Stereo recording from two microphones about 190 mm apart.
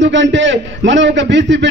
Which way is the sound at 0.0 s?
70° right (ahead or behind).